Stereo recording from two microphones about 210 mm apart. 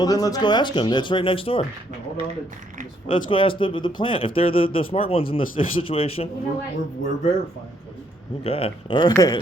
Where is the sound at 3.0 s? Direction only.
25° left (ahead or behind).